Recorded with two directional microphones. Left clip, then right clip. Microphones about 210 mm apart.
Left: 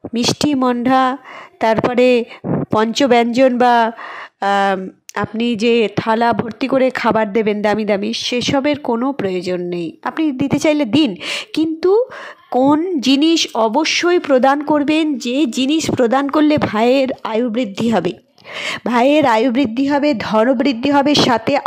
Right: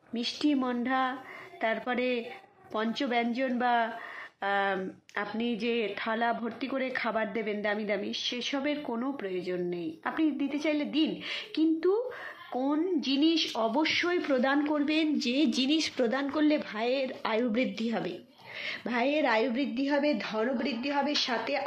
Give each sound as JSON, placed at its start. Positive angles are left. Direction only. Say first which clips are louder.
{"t": 0.1, "sound": "a woman's voice", "louder": "left 13 dB", "side_deg": 55}